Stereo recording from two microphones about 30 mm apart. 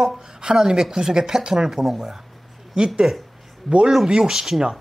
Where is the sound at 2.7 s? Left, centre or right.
Right.